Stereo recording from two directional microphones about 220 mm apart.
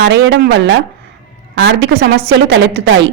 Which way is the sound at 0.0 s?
55° right (ahead or behind).